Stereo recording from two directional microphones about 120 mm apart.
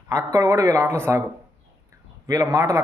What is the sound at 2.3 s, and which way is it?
Speech, 30° right (ahead or behind).